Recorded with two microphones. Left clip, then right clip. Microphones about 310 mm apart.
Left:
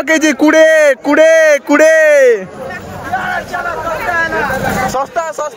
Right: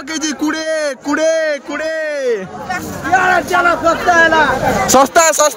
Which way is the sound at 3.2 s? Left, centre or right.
Right.